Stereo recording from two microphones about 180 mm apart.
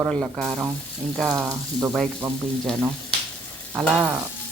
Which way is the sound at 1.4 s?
15° right (ahead or behind).